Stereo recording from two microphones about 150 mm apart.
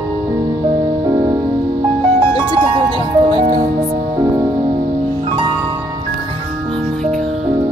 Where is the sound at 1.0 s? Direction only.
25° right (ahead or behind).